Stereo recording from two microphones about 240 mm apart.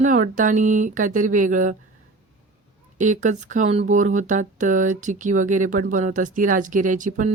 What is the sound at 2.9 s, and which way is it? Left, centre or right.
Speech, right.